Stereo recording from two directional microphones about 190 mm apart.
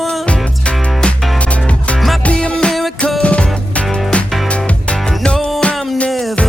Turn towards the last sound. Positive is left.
turn(degrees=0)  # may be behind; listen again after turning